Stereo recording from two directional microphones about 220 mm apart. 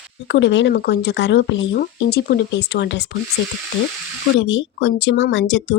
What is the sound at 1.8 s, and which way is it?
Speech, 45° left (ahead or behind).